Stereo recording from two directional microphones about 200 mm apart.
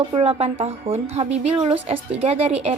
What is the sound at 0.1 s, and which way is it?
A woman's voice, 30° right (ahead or behind).